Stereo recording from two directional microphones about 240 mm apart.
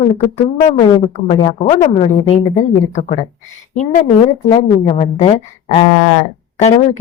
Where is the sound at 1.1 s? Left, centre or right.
Left.